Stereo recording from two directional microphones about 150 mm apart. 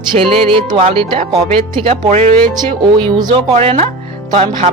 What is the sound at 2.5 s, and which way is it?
Speech, 30° right (ahead or behind).